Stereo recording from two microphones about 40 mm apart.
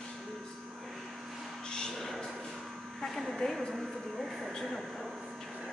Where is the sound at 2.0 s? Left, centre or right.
Centre.